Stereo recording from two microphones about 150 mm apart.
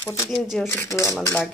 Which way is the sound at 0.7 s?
15° left (ahead or behind).